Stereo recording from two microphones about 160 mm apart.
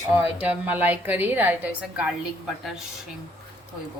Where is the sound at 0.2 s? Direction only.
10° right (ahead or behind).